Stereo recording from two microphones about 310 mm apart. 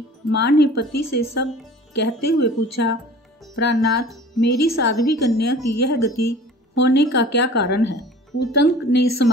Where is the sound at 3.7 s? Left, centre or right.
Left.